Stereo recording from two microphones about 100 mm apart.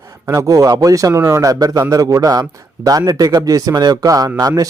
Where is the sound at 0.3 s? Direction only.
35° right (ahead or behind).